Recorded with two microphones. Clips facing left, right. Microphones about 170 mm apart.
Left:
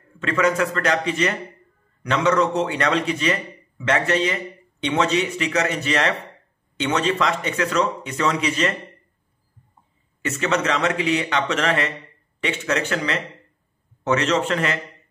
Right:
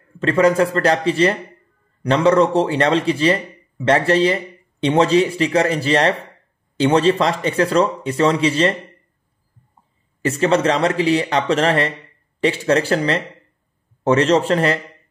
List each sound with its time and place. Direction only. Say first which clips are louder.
0.2 s a man's voice: right 6 dB; 35° right (ahead or behind)
10.2 s a man's voice: right 6 dB; 35° right (ahead or behind)